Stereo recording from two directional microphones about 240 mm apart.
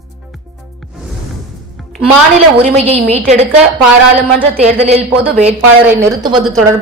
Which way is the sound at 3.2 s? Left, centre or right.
Right.